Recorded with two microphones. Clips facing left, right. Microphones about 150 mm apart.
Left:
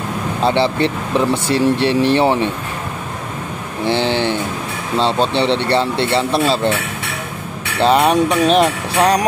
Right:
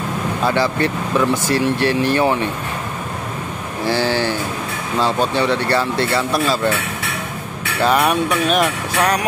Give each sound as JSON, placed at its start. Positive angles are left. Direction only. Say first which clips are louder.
{"t": 0.4, "sound": "speech", "louder": "left 3 dB", "side_deg": 25}
{"t": 3.8, "sound": "speech", "louder": "left 2 dB", "side_deg": 20}
{"t": 7.8, "sound": "speech", "louder": "left 3 dB", "side_deg": 25}